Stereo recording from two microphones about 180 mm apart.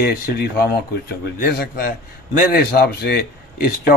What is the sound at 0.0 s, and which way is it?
A man's voice, 60° left (ahead or behind).